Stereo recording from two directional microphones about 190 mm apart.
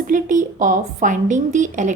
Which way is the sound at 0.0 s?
45° right (ahead or behind).